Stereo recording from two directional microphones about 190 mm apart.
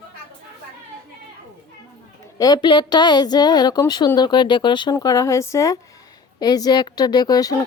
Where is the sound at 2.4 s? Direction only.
20° left (ahead or behind).